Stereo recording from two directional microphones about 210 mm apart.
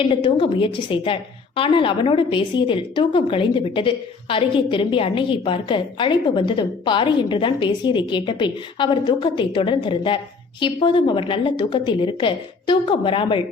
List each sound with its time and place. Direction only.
0.0 s a woman's voice: 25° left (ahead or behind)